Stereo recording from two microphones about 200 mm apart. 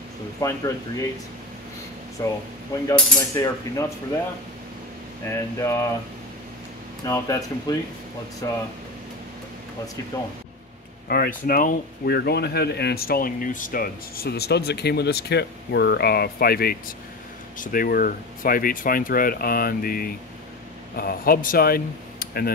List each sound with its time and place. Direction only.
0.4 s mechanisms: 15° left (ahead or behind)
2.2 s speech: 20° left (ahead or behind)
2.7 s mechanisms: 15° left (ahead or behind)
5.6 s mechanisms: 15° left (ahead or behind)
7.1 s mechanisms: 15° left (ahead or behind)
11.1 s speech: 45° left (ahead or behind)